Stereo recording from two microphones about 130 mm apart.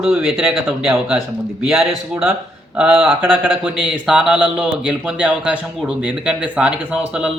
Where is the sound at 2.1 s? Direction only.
15° right (ahead or behind).